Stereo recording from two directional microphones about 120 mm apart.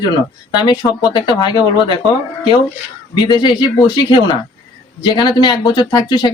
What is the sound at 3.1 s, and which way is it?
Speech, 35° left (ahead or behind).